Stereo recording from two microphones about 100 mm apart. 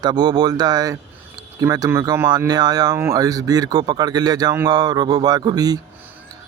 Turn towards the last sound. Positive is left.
turn(degrees=-40)  # may be behind; listen again after turning